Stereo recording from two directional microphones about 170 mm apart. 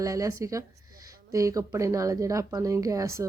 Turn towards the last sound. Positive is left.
turn(degrees=-15)  # may be behind; listen again after turning